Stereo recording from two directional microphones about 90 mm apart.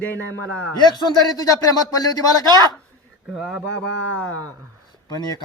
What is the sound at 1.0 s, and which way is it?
Speech, 45° left (ahead or behind).